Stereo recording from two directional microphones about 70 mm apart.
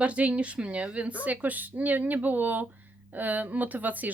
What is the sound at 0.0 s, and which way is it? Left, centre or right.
Speech, centre.